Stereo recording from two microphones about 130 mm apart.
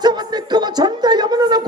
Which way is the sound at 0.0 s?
35° right (ahead or behind).